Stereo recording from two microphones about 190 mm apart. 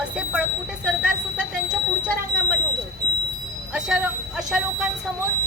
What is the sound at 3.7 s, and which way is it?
Speech, 5° right (ahead or behind).